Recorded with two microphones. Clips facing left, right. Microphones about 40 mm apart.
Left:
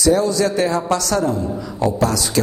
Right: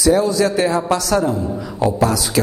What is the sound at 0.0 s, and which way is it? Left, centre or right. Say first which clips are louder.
A man's voice: right 1 dB; centre.